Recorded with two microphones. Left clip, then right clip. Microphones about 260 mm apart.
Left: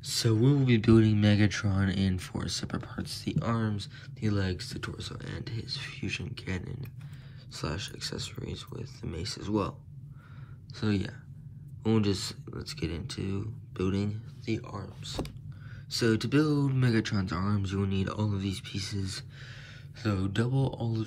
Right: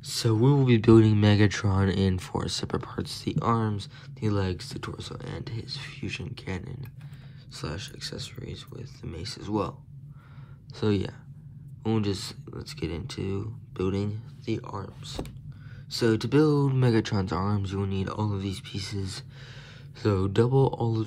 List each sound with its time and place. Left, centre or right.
0.0 s speech: centre
10.8 s speech: centre
20.0 s speech: centre